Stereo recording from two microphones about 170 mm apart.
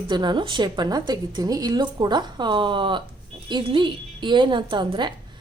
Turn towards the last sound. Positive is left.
turn(degrees=-25)  # may be behind; listen again after turning